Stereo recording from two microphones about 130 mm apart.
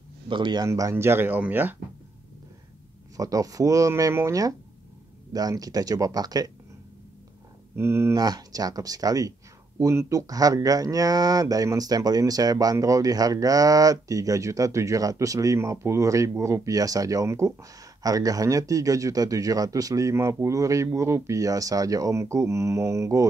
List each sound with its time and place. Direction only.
0.3 s speech: 35° right (ahead or behind)
0.7 s speech: 25° right (ahead or behind)
3.2 s speech: 25° right (ahead or behind)
7.7 s speech: 20° right (ahead or behind)
8.2 s speech: 30° right (ahead or behind)